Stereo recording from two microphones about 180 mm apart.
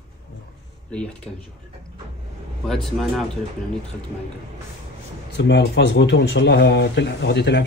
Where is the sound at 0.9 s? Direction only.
5° left (ahead or behind).